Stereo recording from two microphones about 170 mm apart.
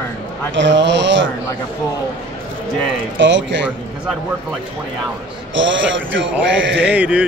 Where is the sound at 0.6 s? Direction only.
90° right.